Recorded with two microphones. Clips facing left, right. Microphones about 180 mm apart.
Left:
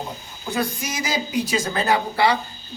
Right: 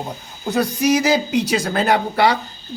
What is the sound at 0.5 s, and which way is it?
A man's voice, 70° right (ahead or behind).